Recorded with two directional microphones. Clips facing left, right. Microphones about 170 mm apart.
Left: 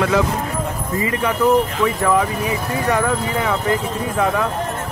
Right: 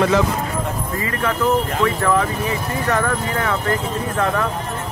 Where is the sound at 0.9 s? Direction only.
20° left (ahead or behind).